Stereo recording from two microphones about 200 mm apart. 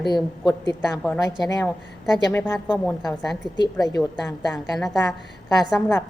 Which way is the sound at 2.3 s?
15° left (ahead or behind).